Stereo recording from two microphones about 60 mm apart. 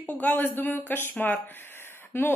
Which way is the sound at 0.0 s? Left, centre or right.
Left.